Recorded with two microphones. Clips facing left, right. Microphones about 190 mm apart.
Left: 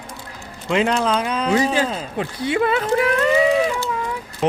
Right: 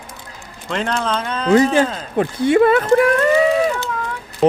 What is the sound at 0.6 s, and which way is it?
Speech, 5° left (ahead or behind).